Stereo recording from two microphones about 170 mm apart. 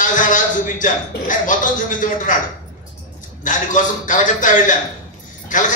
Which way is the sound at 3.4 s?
50° left (ahead or behind).